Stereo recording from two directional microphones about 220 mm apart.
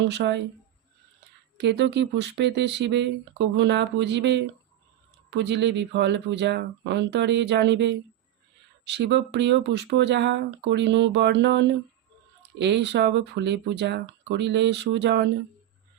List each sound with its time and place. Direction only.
0.0 s speech: 50° right (ahead or behind)
1.5 s speech: 50° right (ahead or behind)